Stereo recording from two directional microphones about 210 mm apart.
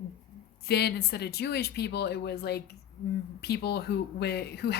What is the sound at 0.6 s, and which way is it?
A woman's voice, 50° left (ahead or behind).